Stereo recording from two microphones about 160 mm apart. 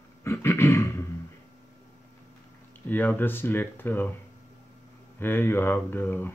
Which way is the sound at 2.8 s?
10° left (ahead or behind).